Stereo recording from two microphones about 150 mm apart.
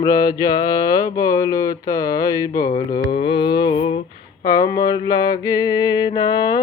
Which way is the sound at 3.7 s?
40° left (ahead or behind).